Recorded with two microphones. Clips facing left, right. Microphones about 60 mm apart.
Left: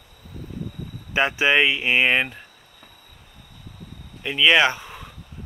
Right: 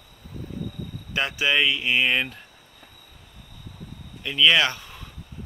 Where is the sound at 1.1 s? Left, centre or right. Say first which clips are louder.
Left 5 dB; left.